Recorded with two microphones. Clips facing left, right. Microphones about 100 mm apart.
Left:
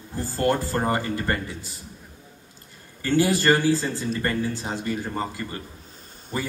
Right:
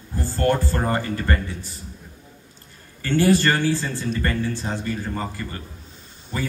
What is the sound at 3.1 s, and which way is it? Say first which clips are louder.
A man's voice: right 1 dB; 15° left (ahead or behind).